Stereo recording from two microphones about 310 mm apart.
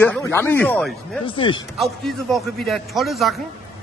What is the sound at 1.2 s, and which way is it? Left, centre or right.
Speech, centre.